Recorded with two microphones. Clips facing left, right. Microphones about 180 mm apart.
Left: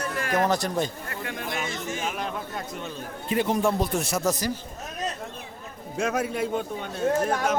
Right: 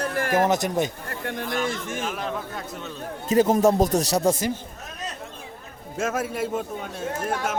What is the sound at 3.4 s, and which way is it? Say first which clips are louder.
Speech: right 6 dB; 40° right (ahead or behind).